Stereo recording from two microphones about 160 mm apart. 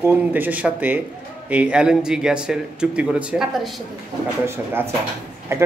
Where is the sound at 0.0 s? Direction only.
10° right (ahead or behind).